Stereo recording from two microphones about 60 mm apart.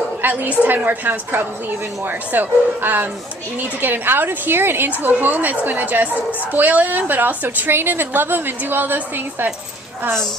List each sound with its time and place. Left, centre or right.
0.2 s a woman's voice: right